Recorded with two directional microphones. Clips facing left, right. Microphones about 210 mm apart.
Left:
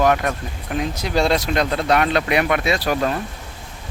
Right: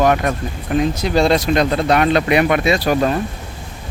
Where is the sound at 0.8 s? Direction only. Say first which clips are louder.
Right 4 dB; 10° left (ahead or behind).